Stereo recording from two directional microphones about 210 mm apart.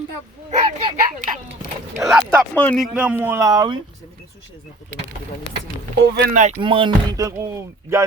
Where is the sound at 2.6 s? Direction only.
5° left (ahead or behind).